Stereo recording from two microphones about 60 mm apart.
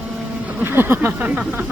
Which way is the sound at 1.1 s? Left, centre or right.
Right.